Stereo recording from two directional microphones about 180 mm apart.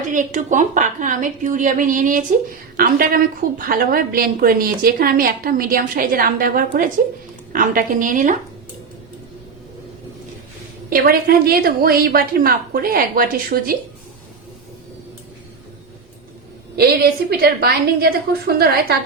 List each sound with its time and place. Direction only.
0.1 s a woman's voice: 45° right (ahead or behind)
10.8 s a woman's voice: 55° right (ahead or behind)
16.7 s a woman's voice: 60° right (ahead or behind)